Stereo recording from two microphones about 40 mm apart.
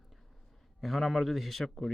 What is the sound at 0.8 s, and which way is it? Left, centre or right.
A man's voice, centre.